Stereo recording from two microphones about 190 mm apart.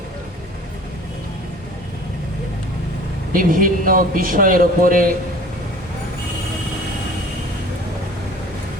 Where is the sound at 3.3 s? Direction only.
50° right (ahead or behind).